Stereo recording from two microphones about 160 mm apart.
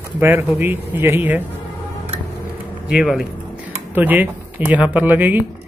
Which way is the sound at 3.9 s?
10° right (ahead or behind).